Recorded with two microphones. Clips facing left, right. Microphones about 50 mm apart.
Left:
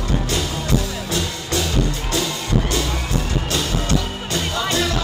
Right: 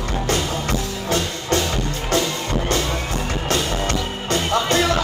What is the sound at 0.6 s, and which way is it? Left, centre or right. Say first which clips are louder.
Music: even; right.